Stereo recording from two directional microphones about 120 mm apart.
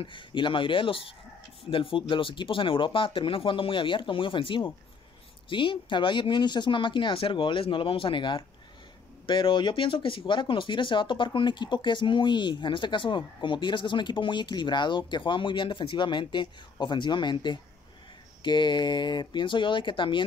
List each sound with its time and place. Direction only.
0.0 s speech: 45° left (ahead or behind)